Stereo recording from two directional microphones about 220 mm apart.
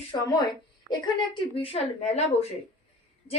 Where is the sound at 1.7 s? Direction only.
30° left (ahead or behind).